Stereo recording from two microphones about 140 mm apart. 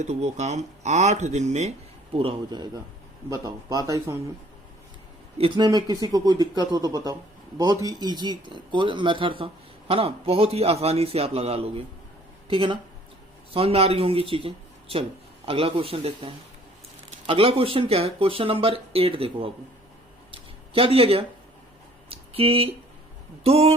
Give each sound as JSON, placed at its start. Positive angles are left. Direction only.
{"t": 0.0, "sound": "speech", "side_deg": -55}
{"t": 2.1, "sound": "speech", "side_deg": -35}
{"t": 3.2, "sound": "speech", "side_deg": -25}
{"t": 5.4, "sound": "speech", "side_deg": -30}
{"t": 20.3, "sound": "a sound", "side_deg": -40}
{"t": 23.4, "sound": "speech", "side_deg": -45}